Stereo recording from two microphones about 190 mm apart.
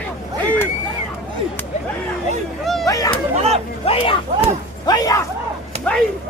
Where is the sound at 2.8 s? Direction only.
20° left (ahead or behind).